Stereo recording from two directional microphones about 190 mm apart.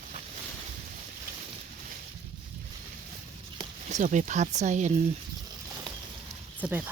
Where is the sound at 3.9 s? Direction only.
40° right (ahead or behind).